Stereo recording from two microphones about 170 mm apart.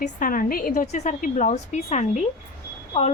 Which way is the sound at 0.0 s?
55° left (ahead or behind).